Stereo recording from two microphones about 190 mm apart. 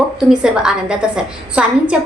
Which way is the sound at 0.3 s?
5° right (ahead or behind).